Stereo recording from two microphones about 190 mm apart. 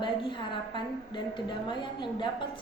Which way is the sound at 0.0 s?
25° left (ahead or behind).